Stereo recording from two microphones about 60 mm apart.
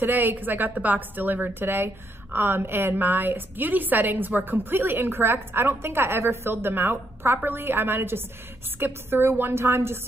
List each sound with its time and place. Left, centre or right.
0.0 s a woman's voice: right